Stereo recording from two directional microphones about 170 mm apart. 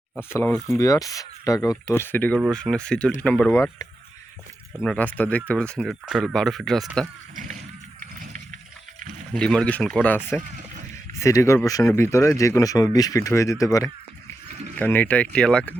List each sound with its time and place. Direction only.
0.2 s speech: 15° left (ahead or behind)
4.8 s speech: 5° left (ahead or behind)
9.3 s speech: 5° left (ahead or behind)